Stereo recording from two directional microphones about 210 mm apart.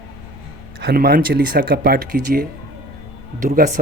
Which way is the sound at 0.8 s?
45° right (ahead or behind).